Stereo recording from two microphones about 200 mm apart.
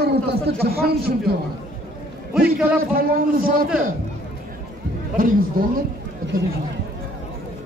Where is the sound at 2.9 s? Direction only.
45° right (ahead or behind).